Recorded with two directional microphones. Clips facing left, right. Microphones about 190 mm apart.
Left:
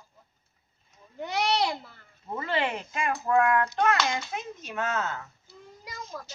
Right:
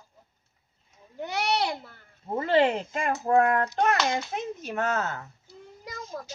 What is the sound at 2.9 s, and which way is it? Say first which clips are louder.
A child's voice: right 2 dB; 40° right (ahead or behind).